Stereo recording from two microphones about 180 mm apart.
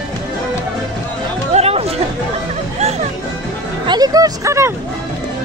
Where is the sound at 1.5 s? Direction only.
35° right (ahead or behind).